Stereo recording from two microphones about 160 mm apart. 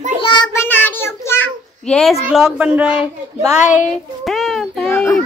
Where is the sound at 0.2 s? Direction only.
25° left (ahead or behind).